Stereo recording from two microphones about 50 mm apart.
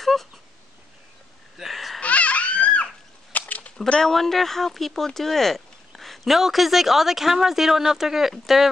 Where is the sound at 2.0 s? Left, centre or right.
Left.